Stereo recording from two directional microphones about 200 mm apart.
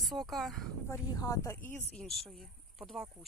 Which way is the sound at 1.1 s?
15° left (ahead or behind).